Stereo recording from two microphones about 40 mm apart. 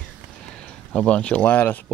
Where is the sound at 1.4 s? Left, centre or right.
Left.